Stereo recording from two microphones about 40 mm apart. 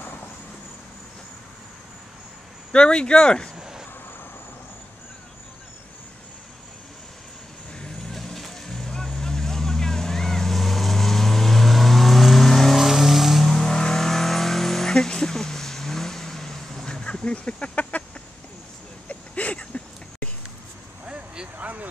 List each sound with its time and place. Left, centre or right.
2.7 s speech: left
3.5 s cricket: centre
7.8 s vehicle: centre
12.8 s vehicle: centre
13.5 s vehicle: centre; by 18.0 s left
19.0 s a sound: left
21.5 s vehicle: right